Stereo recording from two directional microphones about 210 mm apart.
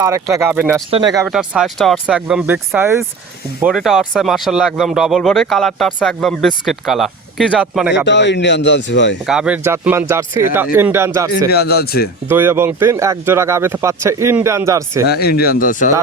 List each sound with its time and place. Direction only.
0.0 s speech: 15° right (ahead or behind)
0.9 s speech: 25° right (ahead or behind)
1.3 s speech: 5° right (ahead or behind)
8.0 s speech: 55° left (ahead or behind)
9.2 s speech: 5° right (ahead or behind)
11.4 s speech: 50° left (ahead or behind)
12.3 s speech: 10° right (ahead or behind)
15.0 s speech: 50° left (ahead or behind)